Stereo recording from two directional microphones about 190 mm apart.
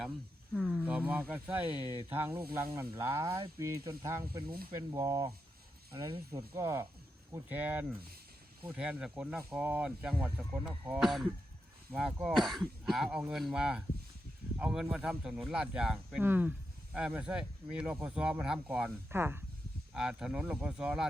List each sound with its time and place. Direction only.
0.5 s speech: 5° right (ahead or behind)
2.4 s speech: 50° right (ahead or behind)
3.0 s speech: 15° right (ahead or behind)
4.4 s speech: 50° right (ahead or behind)
4.7 s speech: 15° right (ahead or behind)
6.6 s speech: 15° right (ahead or behind)